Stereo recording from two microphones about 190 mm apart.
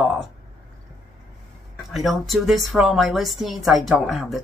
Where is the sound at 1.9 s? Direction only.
Centre (ahead or behind).